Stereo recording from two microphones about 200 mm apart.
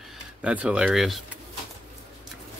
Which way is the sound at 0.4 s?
5° right (ahead or behind).